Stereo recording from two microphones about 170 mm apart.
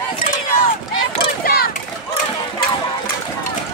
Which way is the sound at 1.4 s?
60° left (ahead or behind).